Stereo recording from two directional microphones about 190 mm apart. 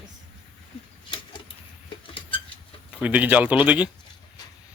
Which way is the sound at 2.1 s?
25° left (ahead or behind).